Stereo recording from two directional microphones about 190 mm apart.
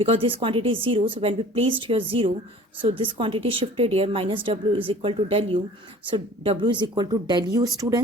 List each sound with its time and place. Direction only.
0.0 s speech: 30° right (ahead or behind)